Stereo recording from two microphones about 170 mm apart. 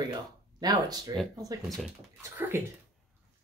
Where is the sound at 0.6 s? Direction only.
25° right (ahead or behind).